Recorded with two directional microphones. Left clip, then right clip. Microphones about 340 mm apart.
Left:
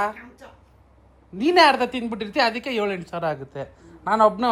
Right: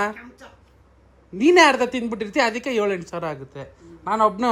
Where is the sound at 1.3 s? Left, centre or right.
Centre.